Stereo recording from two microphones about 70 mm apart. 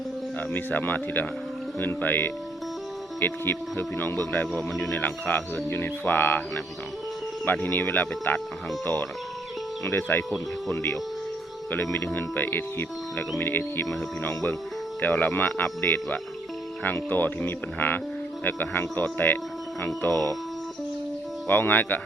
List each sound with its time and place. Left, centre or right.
0.3 s speech: left
5.6 s music: left
7.4 s speech: left
9.8 s music: left
11.7 s music: left
12.1 s speech: left
13.4 s music: left
14.2 s speech: left
15.8 s music: left
16.8 s speech: left
21.4 s speech: left